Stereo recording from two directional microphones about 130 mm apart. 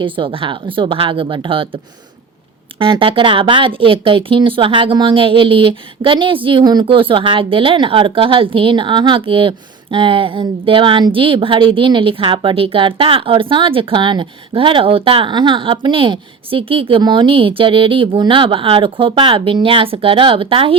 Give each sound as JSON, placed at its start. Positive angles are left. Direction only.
{"t": 0.0, "sound": "speech", "side_deg": -40}